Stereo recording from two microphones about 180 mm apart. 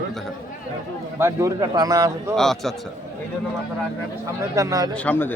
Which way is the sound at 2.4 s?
Centre (ahead or behind).